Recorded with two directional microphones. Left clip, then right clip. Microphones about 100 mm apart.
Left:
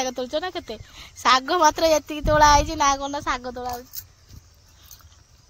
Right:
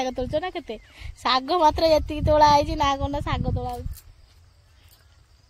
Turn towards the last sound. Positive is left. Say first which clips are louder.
# left 3 dB
turn(degrees=-35)  # may be behind; listen again after turning